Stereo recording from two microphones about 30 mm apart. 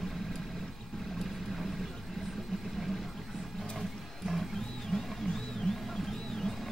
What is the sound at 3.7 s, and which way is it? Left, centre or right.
Music, centre.